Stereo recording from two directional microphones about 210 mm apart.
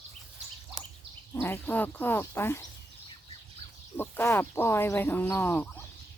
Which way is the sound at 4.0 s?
10° left (ahead or behind).